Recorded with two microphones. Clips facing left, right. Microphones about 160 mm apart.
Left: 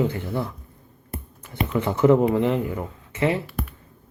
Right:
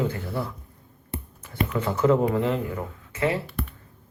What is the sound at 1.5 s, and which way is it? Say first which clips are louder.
Speech: left 2 dB; 20° left (ahead or behind).